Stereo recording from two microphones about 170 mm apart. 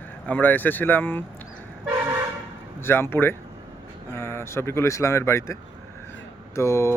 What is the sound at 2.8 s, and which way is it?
Speech, 15° left (ahead or behind).